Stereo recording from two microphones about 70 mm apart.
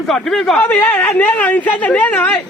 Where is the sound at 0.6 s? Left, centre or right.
Left.